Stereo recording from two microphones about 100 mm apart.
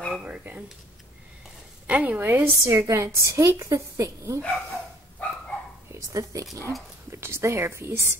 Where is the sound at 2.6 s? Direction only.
25° right (ahead or behind).